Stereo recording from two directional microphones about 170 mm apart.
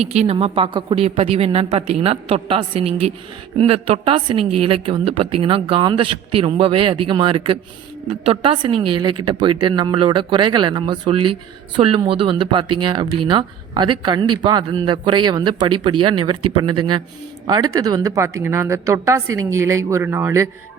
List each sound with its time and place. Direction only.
0.1 s a woman's voice: 40° right (ahead or behind); by 20.5 s 15° right (ahead or behind)